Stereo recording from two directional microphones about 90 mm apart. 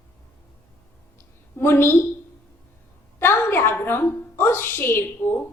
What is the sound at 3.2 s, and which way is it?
A woman's voice, 25° left (ahead or behind).